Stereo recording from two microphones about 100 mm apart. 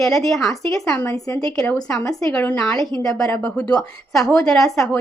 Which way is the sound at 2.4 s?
10° left (ahead or behind).